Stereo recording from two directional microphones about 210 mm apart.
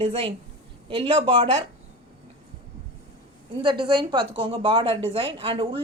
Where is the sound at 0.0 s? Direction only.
25° right (ahead or behind).